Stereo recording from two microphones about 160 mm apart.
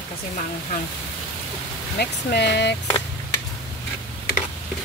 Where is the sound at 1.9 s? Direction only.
90° left.